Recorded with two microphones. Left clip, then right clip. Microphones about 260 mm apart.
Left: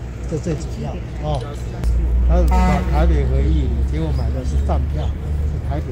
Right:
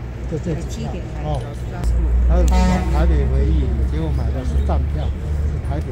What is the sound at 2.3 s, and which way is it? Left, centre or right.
Speech, centre.